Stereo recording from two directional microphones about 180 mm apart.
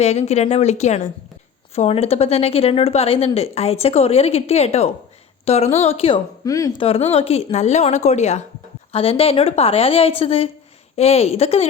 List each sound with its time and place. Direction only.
0.0 s speech: 35° left (ahead or behind)
6.4 s speech: 20° left (ahead or behind)
6.8 s speech: 30° left (ahead or behind)